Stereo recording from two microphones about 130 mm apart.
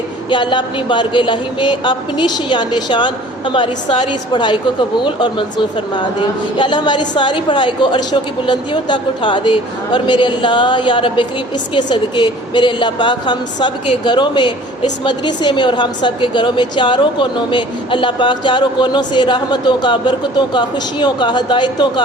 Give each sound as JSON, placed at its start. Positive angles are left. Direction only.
{"t": 0.3, "sound": "a woman's voice", "side_deg": 40}
{"t": 6.6, "sound": "a woman's voice", "side_deg": 35}